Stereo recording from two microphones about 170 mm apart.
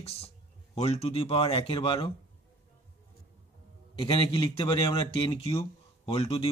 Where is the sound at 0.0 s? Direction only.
35° left (ahead or behind).